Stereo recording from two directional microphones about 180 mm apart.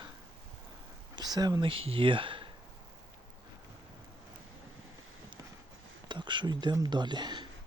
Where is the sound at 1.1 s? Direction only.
20° right (ahead or behind).